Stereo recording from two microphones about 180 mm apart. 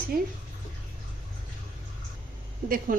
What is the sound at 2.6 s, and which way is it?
Speech, 50° right (ahead or behind).